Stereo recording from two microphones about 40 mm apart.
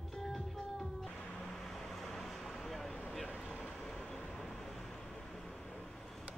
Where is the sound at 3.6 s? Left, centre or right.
Centre.